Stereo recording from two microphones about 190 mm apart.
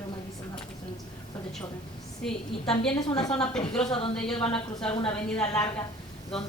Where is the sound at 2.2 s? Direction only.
5° left (ahead or behind).